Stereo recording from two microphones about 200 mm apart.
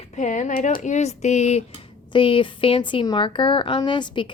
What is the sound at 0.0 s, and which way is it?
A woman's voice, 35° left (ahead or behind).